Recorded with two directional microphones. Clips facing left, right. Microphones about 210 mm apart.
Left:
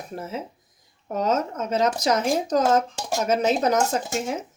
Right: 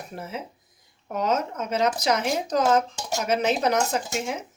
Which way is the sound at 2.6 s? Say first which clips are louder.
Right 2 dB; 40° left (ahead or behind).